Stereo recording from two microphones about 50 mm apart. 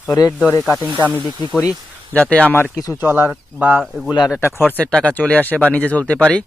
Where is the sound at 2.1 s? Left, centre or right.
Left.